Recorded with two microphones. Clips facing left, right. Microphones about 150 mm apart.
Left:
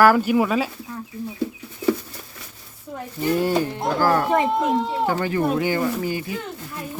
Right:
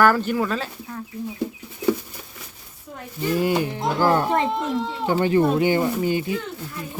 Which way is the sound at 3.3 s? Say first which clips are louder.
Even; 10° right (ahead or behind).